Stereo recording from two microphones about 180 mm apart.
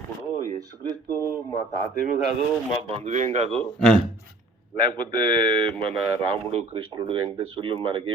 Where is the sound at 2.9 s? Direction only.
40° right (ahead or behind).